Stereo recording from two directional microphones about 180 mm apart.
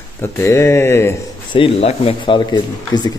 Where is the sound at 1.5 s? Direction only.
30° left (ahead or behind).